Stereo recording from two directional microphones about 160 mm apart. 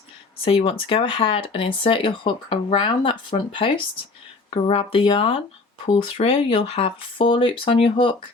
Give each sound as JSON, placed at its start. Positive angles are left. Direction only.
{"t": 0.4, "sound": "speech", "side_deg": 35}